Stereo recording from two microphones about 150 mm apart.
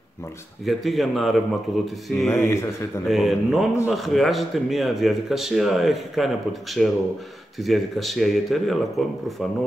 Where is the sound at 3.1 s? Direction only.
Centre (ahead or behind).